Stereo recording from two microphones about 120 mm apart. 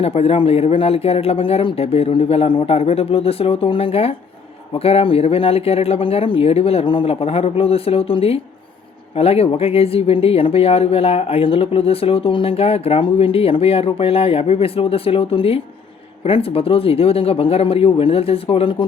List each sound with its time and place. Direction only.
0.0 s speech: 55° left (ahead or behind)